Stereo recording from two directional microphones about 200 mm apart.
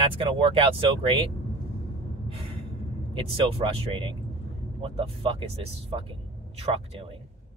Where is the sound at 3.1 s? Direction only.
25° right (ahead or behind).